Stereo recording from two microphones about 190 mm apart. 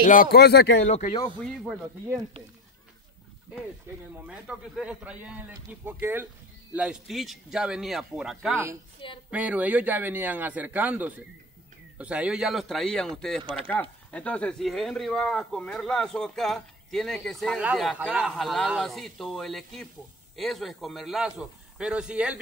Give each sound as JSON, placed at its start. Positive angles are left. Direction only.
{"t": 0.0, "sound": "speech", "side_deg": 45}
{"t": 0.8, "sound": "speech", "side_deg": 40}
{"t": 1.4, "sound": "speech", "side_deg": 0}
{"t": 4.2, "sound": "speech", "side_deg": -5}
{"t": 13.4, "sound": "speech", "side_deg": -25}
{"t": 13.7, "sound": "speech", "side_deg": 5}